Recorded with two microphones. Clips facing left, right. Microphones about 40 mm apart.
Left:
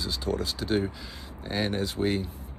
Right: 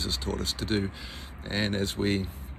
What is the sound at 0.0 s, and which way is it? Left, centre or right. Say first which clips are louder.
Speech: left 2 dB; right.